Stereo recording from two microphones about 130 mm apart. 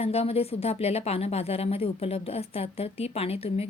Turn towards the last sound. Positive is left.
turn(degrees=50)  # may be behind; listen again after turning